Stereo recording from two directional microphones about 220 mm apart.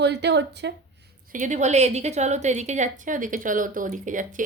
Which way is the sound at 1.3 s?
35° right (ahead or behind).